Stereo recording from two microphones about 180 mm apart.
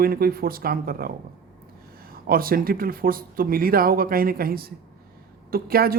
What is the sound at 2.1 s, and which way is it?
A woman's voice, 55° right (ahead or behind).